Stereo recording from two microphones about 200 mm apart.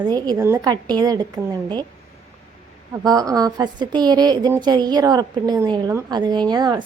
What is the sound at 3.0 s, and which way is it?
A woman's voice, 20° right (ahead or behind).